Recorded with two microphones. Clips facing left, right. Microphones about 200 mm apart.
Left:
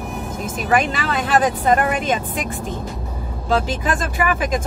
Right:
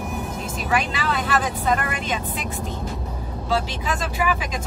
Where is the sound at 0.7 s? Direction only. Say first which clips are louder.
Left 4 dB; 50° left (ahead or behind).